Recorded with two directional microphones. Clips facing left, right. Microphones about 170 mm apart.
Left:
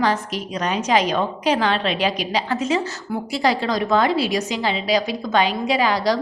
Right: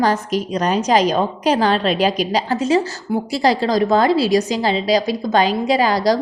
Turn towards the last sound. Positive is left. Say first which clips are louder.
# right 3 dB
turn(degrees=-40)  # may be behind; listen again after turning